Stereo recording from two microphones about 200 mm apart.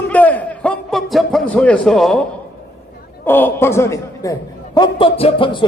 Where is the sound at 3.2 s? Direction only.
10° left (ahead or behind).